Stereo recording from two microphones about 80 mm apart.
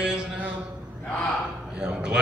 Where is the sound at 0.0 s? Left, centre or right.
Centre.